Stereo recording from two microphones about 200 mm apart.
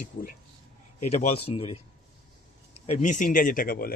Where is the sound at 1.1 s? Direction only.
30° left (ahead or behind).